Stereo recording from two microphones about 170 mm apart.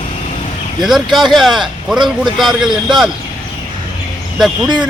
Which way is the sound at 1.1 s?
Centre (ahead or behind).